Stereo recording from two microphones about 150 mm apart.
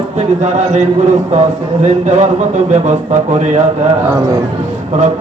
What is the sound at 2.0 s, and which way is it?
Speech, 50° right (ahead or behind).